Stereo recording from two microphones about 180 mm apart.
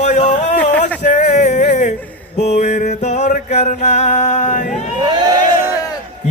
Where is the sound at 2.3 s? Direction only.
40° left (ahead or behind).